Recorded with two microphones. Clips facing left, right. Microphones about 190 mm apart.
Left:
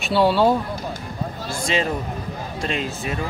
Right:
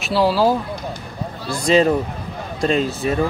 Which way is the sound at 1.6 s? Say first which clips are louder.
Right 8 dB; 40° right (ahead or behind).